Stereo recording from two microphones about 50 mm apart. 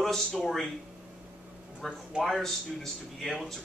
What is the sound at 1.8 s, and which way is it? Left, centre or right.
Speech, centre.